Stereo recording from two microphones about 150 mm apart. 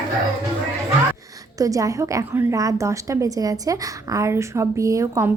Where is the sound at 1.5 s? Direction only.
20° right (ahead or behind).